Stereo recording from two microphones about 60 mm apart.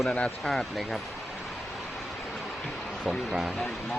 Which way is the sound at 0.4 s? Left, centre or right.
Centre.